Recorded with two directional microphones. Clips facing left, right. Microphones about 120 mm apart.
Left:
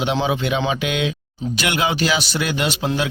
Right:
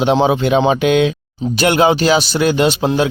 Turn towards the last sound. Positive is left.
turn(degrees=-30)  # may be behind; listen again after turning